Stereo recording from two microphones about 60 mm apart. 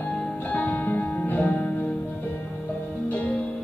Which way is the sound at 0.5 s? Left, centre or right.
Left.